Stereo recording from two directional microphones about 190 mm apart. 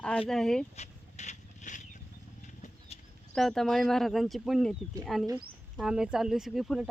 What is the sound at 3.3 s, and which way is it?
Speech, centre (ahead or behind).